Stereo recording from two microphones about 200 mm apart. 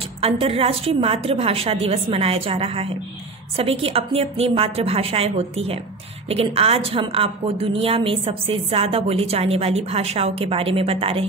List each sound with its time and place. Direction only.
0.2 s a woman's voice: 30° right (ahead or behind)